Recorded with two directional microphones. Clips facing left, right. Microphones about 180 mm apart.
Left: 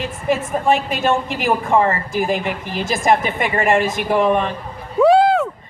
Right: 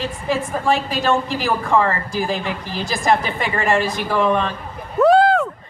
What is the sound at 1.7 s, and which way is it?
A woman's voice, 20° left (ahead or behind).